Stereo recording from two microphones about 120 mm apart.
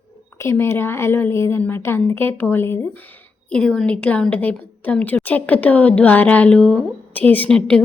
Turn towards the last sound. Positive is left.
turn(degrees=10)  # may be behind; listen again after turning